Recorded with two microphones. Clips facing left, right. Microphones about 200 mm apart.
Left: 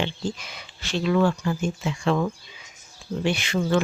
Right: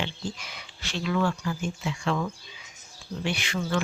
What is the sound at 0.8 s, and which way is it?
Speech, 30° left (ahead or behind).